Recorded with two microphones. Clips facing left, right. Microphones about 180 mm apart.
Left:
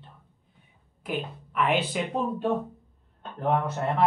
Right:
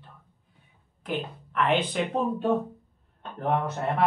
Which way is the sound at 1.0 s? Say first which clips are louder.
Even; 10° left (ahead or behind).